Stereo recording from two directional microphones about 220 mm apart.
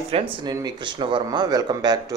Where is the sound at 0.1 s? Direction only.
20° right (ahead or behind).